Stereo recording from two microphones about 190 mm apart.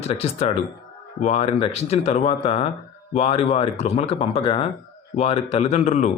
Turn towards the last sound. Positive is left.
turn(degrees=35)  # may be behind; listen again after turning